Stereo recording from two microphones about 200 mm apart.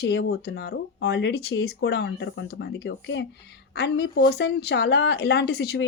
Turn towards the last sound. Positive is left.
turn(degrees=55)  # may be behind; listen again after turning